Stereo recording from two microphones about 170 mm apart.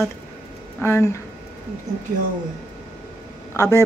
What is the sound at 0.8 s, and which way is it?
Speech, 20° left (ahead or behind).